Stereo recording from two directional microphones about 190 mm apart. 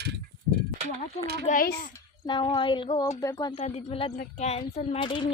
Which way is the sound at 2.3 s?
25° left (ahead or behind).